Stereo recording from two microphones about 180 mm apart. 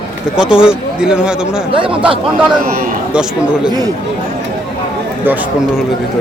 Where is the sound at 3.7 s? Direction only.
20° right (ahead or behind).